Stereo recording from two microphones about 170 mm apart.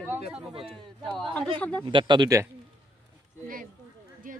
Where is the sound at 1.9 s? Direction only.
30° right (ahead or behind).